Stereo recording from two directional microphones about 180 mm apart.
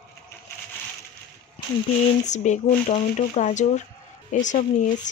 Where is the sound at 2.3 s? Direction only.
40° left (ahead or behind).